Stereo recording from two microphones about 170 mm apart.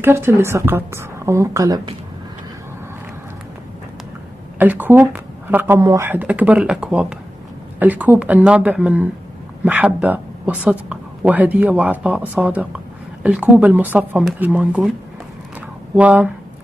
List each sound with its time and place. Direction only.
0.0 s speech: 15° right (ahead or behind)
4.6 s speech: 10° right (ahead or behind)
16.0 s speech: 10° right (ahead or behind)